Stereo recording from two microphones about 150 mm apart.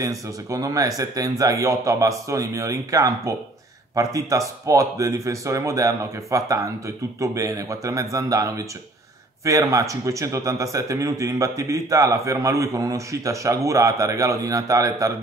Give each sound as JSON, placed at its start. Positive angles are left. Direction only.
{"t": 0.0, "sound": "a man's voice", "side_deg": -20}